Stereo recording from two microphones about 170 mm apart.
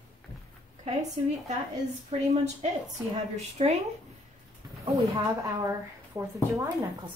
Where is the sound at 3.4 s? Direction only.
40° right (ahead or behind).